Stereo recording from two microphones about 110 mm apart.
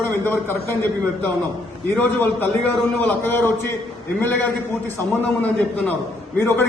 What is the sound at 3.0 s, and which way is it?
Speech, 20° left (ahead or behind).